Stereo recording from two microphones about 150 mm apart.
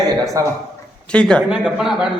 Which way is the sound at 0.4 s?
20° right (ahead or behind).